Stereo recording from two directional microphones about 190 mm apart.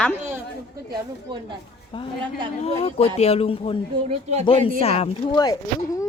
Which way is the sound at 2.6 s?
30° left (ahead or behind).